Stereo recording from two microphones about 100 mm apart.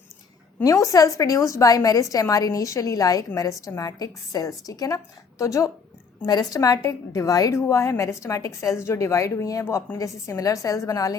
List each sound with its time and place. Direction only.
0.6 s a woman's voice: 35° left (ahead or behind)